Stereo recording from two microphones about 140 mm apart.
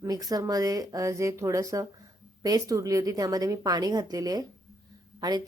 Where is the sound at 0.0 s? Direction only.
25° right (ahead or behind).